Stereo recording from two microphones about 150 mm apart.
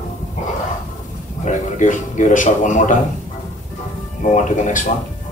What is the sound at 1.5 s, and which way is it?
A man's voice, 55° left (ahead or behind).